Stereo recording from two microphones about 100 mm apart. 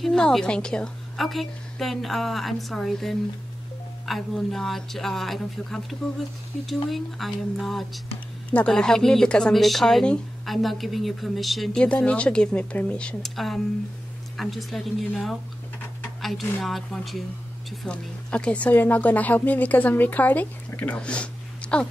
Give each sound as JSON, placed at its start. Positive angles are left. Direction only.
{"t": 0.0, "sound": "speech", "side_deg": 5}
{"t": 16.2, "sound": "a sound", "side_deg": 0}
{"t": 16.6, "sound": "speech", "side_deg": 0}